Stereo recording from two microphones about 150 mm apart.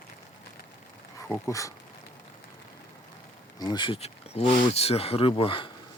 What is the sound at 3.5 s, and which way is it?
Speech, 30° left (ahead or behind).